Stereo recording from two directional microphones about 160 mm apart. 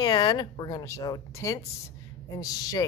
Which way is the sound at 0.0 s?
25° left (ahead or behind).